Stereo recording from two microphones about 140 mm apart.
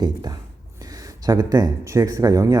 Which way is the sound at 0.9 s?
25° right (ahead or behind).